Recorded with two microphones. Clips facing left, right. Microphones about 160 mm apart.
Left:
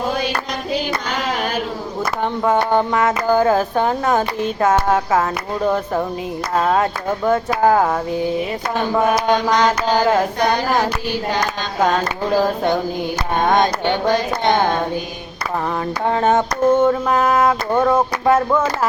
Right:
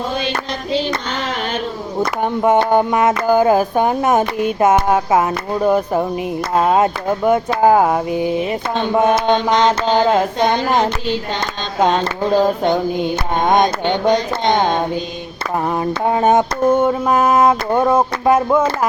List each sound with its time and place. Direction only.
2.2 s speech: 20° right (ahead or behind)
15.8 s speech: 15° right (ahead or behind)